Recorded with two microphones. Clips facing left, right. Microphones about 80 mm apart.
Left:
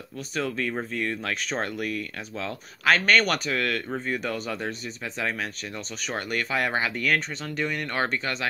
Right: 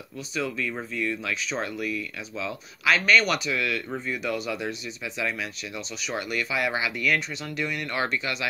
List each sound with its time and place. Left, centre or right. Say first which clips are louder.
0.4 s speech: left 1 dB; left
6.0 s speech: even; left